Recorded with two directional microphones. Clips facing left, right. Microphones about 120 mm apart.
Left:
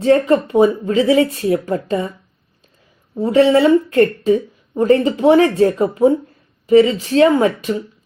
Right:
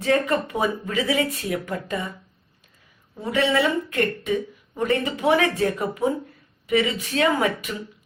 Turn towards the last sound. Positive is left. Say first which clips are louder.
# left 8 dB
turn(degrees=30)  # may be behind; listen again after turning